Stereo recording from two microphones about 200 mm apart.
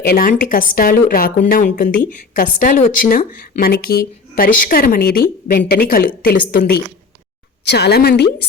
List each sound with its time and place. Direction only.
0.0 s a woman's voice: 50° left (ahead or behind)